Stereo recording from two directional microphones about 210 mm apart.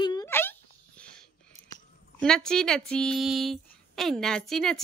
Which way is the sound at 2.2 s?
5° left (ahead or behind).